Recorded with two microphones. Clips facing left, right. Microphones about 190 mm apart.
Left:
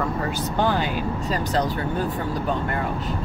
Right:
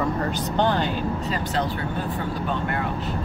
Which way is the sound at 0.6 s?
10° left (ahead or behind).